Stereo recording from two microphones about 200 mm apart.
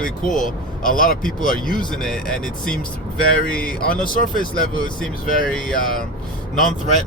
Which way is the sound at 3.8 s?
40° left (ahead or behind).